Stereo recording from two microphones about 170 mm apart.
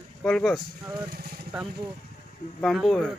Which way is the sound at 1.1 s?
65° right (ahead or behind).